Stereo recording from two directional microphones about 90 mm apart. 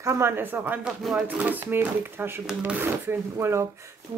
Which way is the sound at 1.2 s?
20° right (ahead or behind).